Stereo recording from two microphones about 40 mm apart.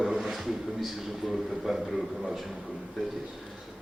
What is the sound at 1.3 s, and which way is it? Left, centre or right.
Speech, centre.